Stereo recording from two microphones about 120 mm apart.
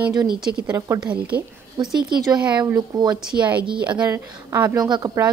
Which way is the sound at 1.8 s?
40° right (ahead or behind).